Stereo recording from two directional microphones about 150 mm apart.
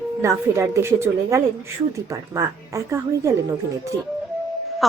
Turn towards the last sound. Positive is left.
turn(degrees=-20)  # may be behind; listen again after turning